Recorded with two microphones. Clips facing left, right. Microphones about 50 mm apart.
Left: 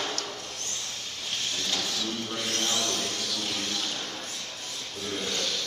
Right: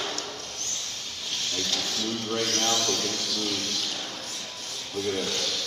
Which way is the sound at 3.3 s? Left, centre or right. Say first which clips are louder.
Right 2 dB; centre.